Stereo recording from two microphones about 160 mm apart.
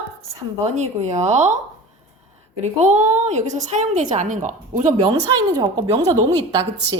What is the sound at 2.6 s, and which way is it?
A woman's voice, 45° right (ahead or behind).